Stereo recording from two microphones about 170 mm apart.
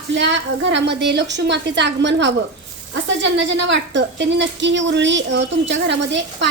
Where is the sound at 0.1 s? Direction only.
90° right.